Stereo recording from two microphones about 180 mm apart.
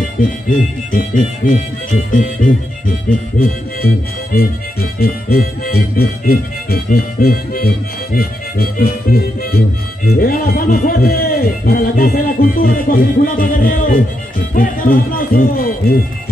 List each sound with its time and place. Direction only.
0.2 s a man's voice: 45° left (ahead or behind)
3.1 s music: 50° left (ahead or behind)
10.0 s a man's voice: 55° left (ahead or behind)